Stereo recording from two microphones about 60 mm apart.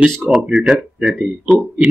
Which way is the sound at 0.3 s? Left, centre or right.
Centre.